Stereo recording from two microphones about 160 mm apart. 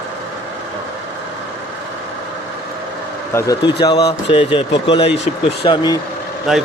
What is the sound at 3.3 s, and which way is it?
Speech, 20° left (ahead or behind).